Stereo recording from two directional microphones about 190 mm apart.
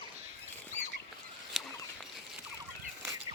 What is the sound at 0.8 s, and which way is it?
Rodents, 10° left (ahead or behind).